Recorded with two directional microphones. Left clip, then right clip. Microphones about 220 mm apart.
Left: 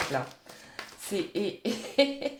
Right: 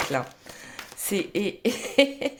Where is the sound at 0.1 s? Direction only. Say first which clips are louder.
Right 4 dB; 35° right (ahead or behind).